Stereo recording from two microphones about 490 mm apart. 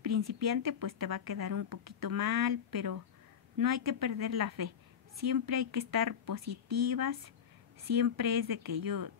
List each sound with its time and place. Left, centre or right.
0.0 s speech: right